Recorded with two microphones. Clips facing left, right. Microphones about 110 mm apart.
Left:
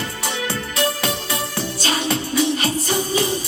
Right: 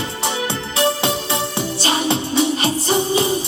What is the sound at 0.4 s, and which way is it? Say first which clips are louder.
Music: right 3 dB; 25° right (ahead or behind).